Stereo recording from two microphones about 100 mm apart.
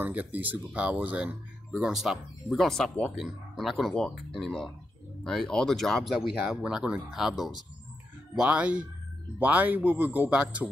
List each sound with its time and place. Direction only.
0.0 s speech: 15° right (ahead or behind)